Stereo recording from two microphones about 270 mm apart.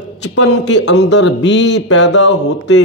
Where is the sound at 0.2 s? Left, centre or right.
Left.